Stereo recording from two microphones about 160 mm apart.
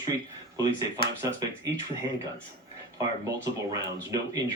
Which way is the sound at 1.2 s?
20° right (ahead or behind).